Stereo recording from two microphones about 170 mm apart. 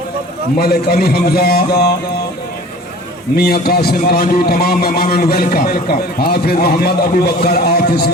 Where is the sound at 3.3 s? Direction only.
65° left (ahead or behind).